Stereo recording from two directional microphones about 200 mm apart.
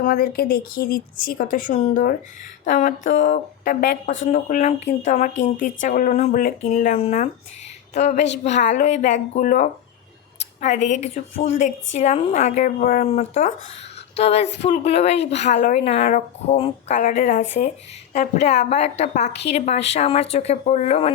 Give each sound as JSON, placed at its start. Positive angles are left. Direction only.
{"t": 0.0, "sound": "a woman's voice", "side_deg": 50}
{"t": 16.0, "sound": "a woman's voice", "side_deg": 40}